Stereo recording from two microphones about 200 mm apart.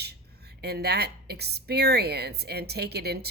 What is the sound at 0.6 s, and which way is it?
Speech, 55° right (ahead or behind).